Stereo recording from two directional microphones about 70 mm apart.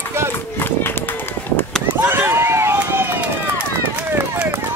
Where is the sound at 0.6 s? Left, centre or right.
Left.